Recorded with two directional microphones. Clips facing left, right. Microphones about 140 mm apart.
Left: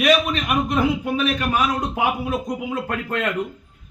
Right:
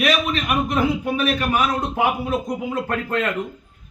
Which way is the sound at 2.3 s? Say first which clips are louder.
Right 1 dB; centre (ahead or behind).